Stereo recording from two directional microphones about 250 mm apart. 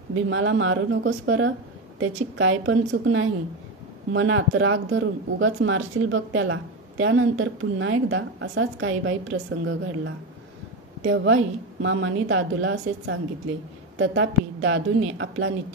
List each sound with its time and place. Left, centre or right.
0.3 s speech: right